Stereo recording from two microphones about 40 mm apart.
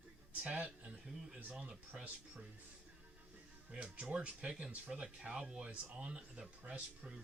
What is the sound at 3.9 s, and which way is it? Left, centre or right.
Speech, right.